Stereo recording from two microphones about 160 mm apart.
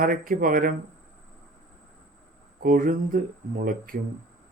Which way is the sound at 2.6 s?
60° right (ahead or behind).